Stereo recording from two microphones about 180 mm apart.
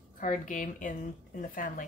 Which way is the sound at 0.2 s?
45° left (ahead or behind).